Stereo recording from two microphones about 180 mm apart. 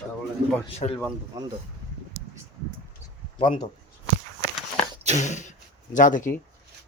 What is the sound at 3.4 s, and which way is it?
Speech, 25° left (ahead or behind).